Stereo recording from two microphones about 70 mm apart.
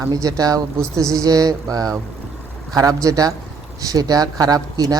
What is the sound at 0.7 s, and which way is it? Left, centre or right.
Speech, right.